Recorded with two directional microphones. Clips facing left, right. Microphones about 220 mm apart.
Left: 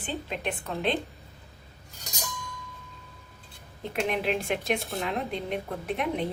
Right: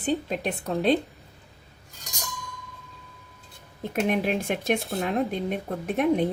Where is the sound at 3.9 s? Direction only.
45° right (ahead or behind).